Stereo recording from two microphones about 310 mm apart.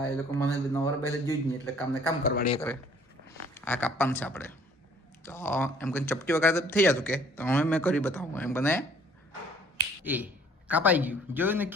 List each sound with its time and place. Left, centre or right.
0.0 s speech: centre
2.2 s a man's voice: left
3.5 s speech: centre
10.0 s speech: centre